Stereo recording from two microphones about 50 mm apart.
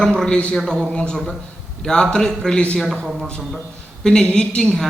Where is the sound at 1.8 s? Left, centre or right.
Centre.